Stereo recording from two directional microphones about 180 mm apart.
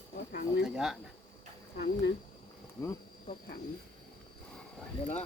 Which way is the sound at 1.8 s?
75° left (ahead or behind).